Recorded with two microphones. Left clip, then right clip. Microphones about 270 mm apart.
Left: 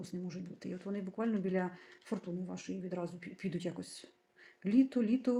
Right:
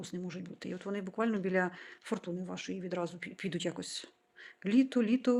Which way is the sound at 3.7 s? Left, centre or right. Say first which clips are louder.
Right 5 dB; right.